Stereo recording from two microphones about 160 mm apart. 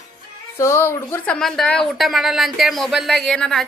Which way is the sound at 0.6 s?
15° left (ahead or behind).